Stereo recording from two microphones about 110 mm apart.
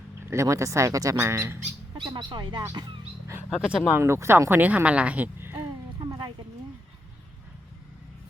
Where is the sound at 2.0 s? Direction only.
45° right (ahead or behind).